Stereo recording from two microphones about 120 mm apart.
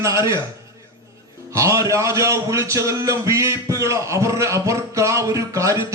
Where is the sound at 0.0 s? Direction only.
25° right (ahead or behind).